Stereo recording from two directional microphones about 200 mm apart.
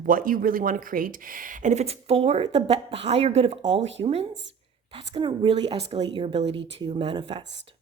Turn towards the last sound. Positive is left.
turn(degrees=-25)  # may be behind; listen again after turning